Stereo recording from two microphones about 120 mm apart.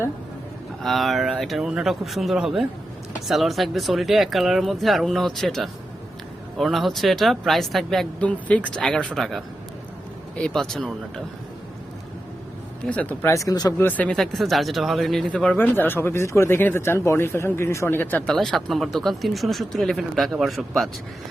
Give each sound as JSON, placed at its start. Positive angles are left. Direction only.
{"t": 0.8, "sound": "speech", "side_deg": 0}
{"t": 10.4, "sound": "speech", "side_deg": 5}
{"t": 12.8, "sound": "speech", "side_deg": 10}
{"t": 13.3, "sound": "speech", "side_deg": 30}
{"t": 13.7, "sound": "speech", "side_deg": 15}
{"t": 14.2, "sound": "speech", "side_deg": 0}
{"t": 18.3, "sound": "speech", "side_deg": 0}